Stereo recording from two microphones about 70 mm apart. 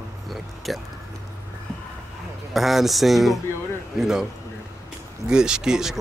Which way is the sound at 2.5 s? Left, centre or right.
Centre.